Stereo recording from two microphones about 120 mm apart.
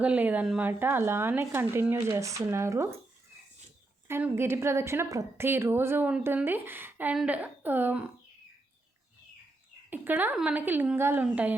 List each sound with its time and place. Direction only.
0.0 s speech: 10° right (ahead or behind)
4.1 s a woman's voice: 20° right (ahead or behind)
9.9 s a woman's voice: 15° right (ahead or behind)